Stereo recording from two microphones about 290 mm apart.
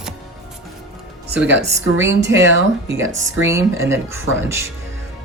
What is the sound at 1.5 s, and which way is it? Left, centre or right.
A woman's voice, right.